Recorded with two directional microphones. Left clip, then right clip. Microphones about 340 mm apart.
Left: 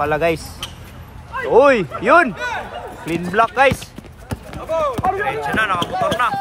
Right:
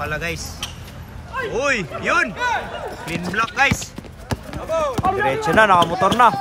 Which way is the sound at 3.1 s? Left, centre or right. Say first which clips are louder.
Left 6 dB; centre.